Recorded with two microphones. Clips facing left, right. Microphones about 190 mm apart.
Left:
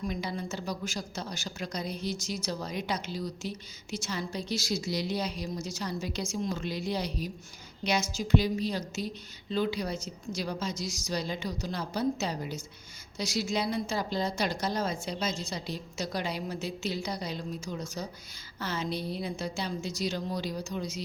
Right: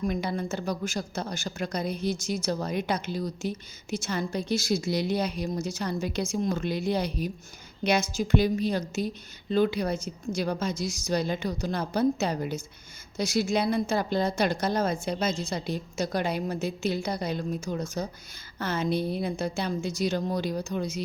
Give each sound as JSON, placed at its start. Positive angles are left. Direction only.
{"t": 0.1, "sound": "a woman's voice", "side_deg": -55}